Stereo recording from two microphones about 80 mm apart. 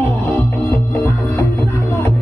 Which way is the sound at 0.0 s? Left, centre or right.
Left.